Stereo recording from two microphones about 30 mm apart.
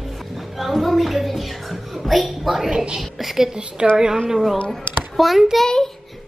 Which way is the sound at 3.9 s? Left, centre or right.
Right.